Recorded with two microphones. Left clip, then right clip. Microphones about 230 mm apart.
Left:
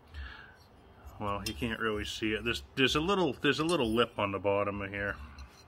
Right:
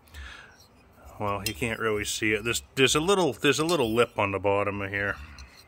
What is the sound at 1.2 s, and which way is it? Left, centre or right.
Speech, right.